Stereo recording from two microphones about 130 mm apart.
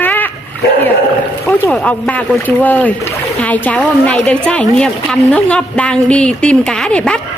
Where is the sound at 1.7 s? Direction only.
10° left (ahead or behind).